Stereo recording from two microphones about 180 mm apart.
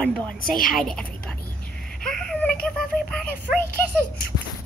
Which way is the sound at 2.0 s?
5° left (ahead or behind).